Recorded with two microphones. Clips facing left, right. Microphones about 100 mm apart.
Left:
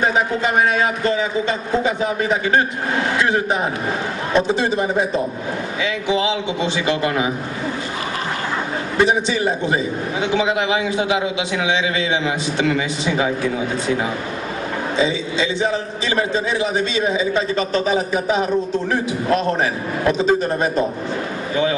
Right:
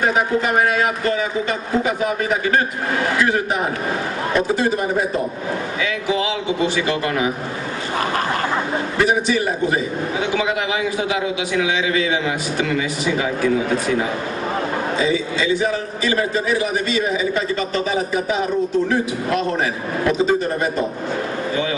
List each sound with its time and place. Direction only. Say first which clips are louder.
0.0 s a man's voice: even; 25° left (ahead or behind)
4.3 s a man's voice: left 1 dB; 25° left (ahead or behind)
8.9 s a man's voice: left 1 dB; 25° left (ahead or behind)
15.0 s a man's voice: left 2 dB; 25° left (ahead or behind)